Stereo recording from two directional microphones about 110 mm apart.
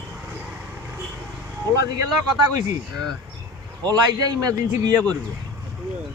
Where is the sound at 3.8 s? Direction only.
35° right (ahead or behind).